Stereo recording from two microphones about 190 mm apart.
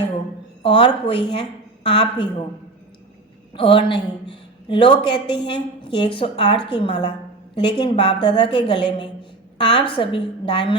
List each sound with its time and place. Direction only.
0.6 s a woman's voice: 25° left (ahead or behind)
3.5 s a woman's voice: 25° left (ahead or behind)